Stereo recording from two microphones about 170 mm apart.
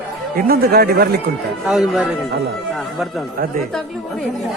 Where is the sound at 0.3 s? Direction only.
65° right (ahead or behind).